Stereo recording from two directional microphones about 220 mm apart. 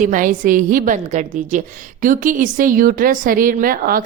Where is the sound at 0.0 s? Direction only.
35° right (ahead or behind).